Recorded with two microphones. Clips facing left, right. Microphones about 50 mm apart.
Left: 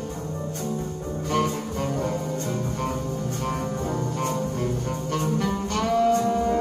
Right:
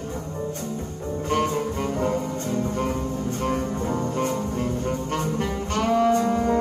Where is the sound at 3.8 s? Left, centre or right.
Right.